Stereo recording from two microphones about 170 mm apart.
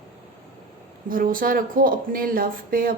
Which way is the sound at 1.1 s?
55° right (ahead or behind).